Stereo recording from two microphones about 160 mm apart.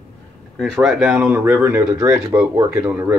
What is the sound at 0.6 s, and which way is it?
Speech, centre (ahead or behind).